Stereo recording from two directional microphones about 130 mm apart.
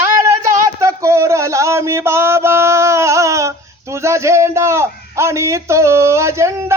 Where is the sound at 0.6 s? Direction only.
20° right (ahead or behind).